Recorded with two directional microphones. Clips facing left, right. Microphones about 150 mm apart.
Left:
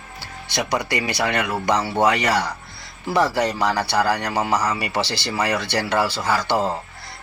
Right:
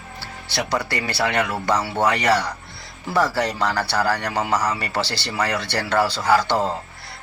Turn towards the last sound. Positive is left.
turn(degrees=10)  # may be behind; listen again after turning